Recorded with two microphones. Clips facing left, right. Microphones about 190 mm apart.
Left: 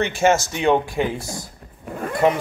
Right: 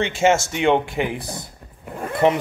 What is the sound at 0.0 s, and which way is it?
Speech, 25° right (ahead or behind).